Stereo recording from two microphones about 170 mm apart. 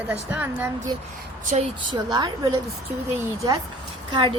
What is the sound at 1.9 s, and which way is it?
Speech, 25° right (ahead or behind).